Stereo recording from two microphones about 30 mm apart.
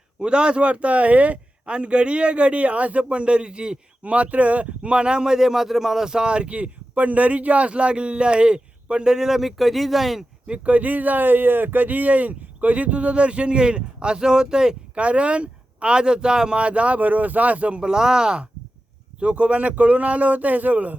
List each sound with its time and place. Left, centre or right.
0.2 s speech: right
1.6 s speech: right
4.0 s speech: right; by 6.1 s centre
6.1 s speech: right
9.1 s speech: centre
9.4 s speech: centre
10.4 s speech: right
14.9 s speech: right
16.6 s speech: right
17.0 s speech: right
17.7 s speech: right
19.2 s speech: right